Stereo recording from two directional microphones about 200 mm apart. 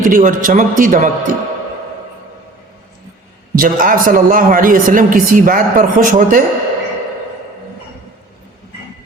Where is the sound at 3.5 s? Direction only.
45° right (ahead or behind).